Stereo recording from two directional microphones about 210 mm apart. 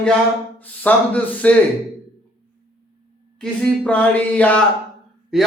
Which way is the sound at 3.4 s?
5° left (ahead or behind).